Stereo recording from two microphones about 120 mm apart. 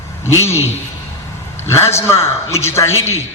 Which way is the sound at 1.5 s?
20° left (ahead or behind).